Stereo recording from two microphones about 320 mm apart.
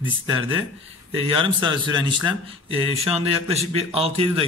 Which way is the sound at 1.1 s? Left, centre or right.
Centre.